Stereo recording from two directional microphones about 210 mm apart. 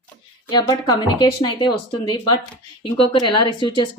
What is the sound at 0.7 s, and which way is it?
Speech, 20° left (ahead or behind).